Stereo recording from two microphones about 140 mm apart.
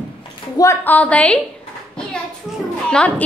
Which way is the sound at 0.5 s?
15° left (ahead or behind).